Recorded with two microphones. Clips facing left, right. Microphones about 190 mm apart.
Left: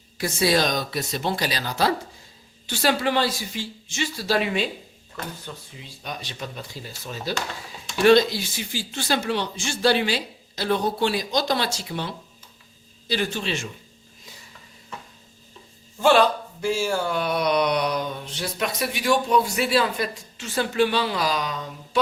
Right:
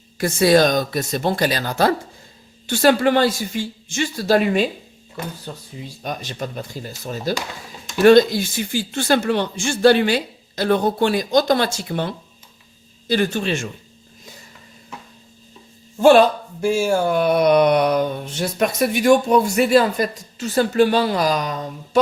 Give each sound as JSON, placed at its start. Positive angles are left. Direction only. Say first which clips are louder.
{"t": 0.2, "sound": "speech", "louder": "right 7 dB", "side_deg": -50}
{"t": 16.0, "sound": "speech", "louder": "right 6 dB", "side_deg": -50}